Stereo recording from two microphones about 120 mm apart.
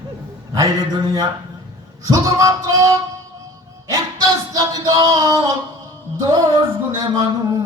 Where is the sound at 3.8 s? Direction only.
30° right (ahead or behind).